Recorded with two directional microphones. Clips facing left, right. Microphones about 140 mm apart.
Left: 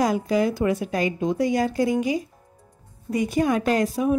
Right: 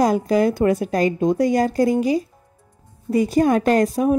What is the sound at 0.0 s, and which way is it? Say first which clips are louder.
A woman's voice: right 4 dB; 45° right (ahead or behind).